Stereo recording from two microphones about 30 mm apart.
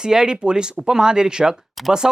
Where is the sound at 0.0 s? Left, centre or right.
Right.